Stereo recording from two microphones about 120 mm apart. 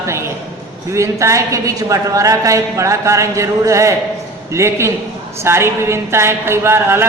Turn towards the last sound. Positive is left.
turn(degrees=-20)  # may be behind; listen again after turning